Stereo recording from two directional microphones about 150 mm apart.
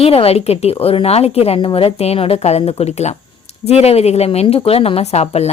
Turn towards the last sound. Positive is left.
turn(degrees=45)  # may be behind; listen again after turning